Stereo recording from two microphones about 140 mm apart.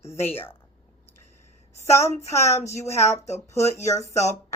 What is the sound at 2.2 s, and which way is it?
Speech, 20° left (ahead or behind).